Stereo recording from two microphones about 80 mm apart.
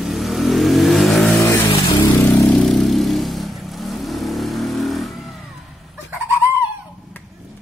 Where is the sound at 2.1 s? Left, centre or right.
Left.